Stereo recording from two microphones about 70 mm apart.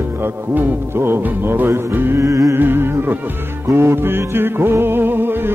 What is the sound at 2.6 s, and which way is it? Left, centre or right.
Music, right.